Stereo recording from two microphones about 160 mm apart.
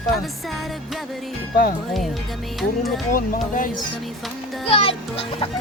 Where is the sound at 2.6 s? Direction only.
Centre (ahead or behind).